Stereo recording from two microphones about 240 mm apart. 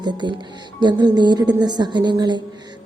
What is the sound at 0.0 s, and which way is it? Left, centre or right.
Speech, centre.